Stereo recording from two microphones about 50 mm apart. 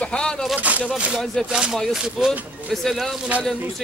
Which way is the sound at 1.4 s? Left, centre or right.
Centre.